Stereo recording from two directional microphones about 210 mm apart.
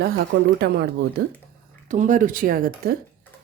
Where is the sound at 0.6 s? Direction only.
50° right (ahead or behind).